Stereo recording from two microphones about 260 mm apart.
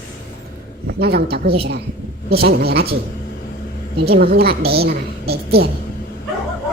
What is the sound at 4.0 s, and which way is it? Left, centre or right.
A woman's voice, right.